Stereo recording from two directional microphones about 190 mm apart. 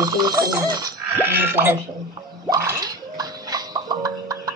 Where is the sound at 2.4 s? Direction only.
15° right (ahead or behind).